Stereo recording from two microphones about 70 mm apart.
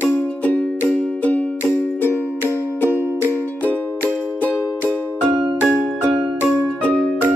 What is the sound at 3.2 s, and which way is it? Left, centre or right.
Music, left.